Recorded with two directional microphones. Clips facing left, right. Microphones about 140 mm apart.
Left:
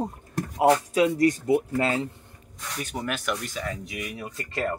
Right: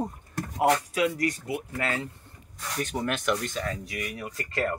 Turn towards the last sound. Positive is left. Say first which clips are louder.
# even
turn(degrees=20)  # may be behind; listen again after turning